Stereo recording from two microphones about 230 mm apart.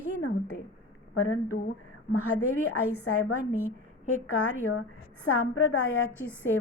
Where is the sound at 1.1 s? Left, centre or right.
Left.